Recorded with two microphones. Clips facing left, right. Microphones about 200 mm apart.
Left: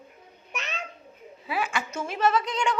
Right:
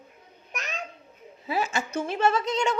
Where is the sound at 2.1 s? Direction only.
25° right (ahead or behind).